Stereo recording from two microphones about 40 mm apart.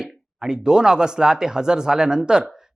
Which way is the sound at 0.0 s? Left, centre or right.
Centre.